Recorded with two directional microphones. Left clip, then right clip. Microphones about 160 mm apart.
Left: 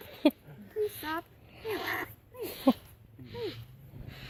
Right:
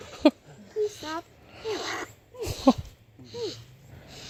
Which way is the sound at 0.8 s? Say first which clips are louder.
Right 4 dB; 55° right (ahead or behind).